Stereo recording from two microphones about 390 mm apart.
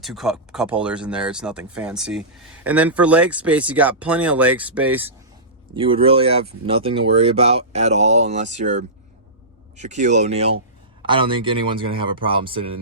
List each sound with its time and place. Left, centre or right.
0.0 s speech: centre